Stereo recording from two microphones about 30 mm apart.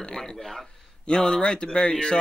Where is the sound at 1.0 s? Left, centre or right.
Left.